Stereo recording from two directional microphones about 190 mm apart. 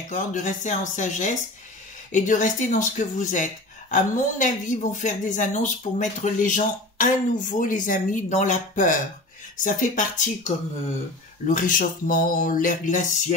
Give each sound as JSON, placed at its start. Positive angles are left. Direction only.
{"t": 0.1, "sound": "a woman's voice", "side_deg": 40}